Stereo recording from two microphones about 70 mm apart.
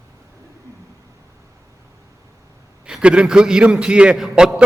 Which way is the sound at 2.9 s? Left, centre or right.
Centre.